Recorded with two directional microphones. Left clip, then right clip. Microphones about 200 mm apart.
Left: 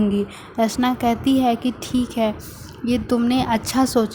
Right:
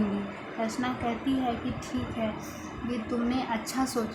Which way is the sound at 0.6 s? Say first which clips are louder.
Left 12 dB; 45° left (ahead or behind).